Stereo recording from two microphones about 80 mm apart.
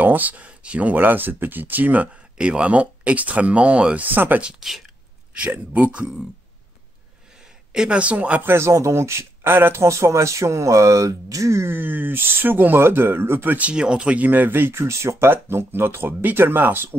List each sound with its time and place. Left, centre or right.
0.0 s speech: right
4.5 s speech: centre
5.3 s speech: centre
7.7 s speech: centre
8.5 s speech: right
13.6 s speech: centre